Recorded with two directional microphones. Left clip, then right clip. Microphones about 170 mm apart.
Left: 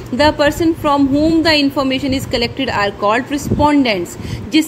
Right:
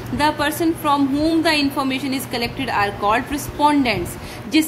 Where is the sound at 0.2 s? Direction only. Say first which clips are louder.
Left 6 dB; 30° left (ahead or behind).